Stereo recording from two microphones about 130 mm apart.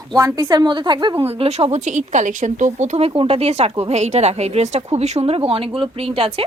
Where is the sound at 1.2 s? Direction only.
50° right (ahead or behind).